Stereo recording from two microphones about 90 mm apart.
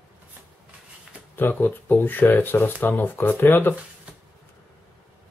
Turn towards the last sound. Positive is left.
turn(degrees=20)  # may be behind; listen again after turning